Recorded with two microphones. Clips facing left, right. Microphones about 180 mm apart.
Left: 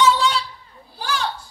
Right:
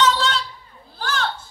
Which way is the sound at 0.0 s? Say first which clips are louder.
Left 2 dB; 10° left (ahead or behind).